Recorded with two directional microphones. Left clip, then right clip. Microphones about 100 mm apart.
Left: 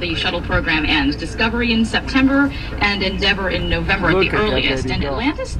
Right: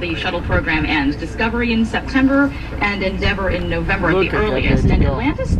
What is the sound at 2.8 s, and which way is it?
Speech, 55° left (ahead or behind).